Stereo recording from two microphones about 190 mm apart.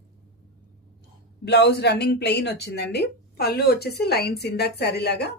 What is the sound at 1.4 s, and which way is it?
A woman's voice, 60° left (ahead or behind).